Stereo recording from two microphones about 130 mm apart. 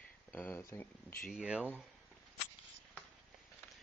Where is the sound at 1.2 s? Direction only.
Centre (ahead or behind).